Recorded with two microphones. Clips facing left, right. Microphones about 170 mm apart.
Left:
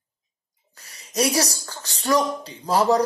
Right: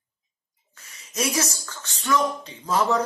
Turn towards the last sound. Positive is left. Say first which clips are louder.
# left 4 dB
turn(degrees=35)  # may be behind; listen again after turning